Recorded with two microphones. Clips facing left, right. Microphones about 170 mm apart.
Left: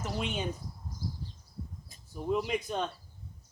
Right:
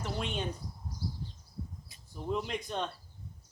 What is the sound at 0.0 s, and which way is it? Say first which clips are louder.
Speech: left 1 dB; centre (ahead or behind).